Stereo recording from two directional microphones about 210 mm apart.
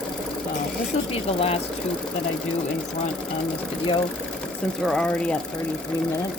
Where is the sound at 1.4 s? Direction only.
30° left (ahead or behind).